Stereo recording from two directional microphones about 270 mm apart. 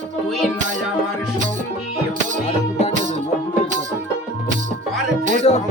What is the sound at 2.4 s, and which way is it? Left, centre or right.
Music, left.